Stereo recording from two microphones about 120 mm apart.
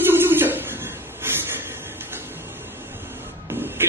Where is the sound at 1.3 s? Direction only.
20° right (ahead or behind).